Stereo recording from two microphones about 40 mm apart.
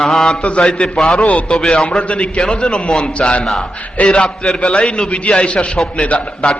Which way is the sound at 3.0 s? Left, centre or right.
Left.